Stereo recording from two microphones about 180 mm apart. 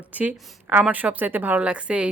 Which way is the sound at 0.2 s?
10° right (ahead or behind).